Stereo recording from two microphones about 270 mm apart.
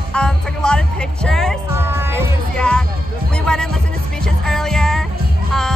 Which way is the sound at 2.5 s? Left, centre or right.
Centre.